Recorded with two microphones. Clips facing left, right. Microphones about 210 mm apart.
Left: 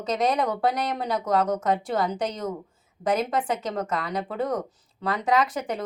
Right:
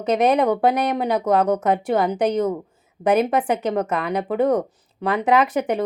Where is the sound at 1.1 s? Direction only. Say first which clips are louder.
Right 4 dB; 65° right (ahead or behind).